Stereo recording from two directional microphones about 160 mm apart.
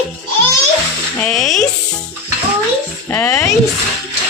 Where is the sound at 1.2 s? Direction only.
5° left (ahead or behind).